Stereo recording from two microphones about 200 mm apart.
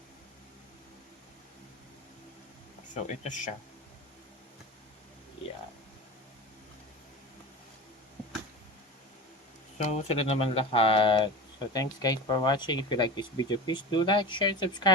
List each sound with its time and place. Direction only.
2.9 s speech: 40° left (ahead or behind)
9.7 s speech: 30° left (ahead or behind)